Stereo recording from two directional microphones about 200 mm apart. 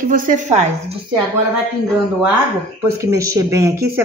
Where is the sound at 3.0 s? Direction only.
15° right (ahead or behind).